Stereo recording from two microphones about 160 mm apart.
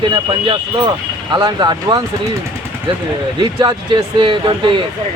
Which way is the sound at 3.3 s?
30° right (ahead or behind).